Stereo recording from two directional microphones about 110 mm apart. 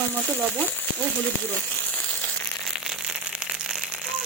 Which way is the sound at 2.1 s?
10° left (ahead or behind).